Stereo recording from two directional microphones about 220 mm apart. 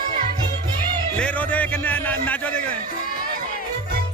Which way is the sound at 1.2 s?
5° left (ahead or behind).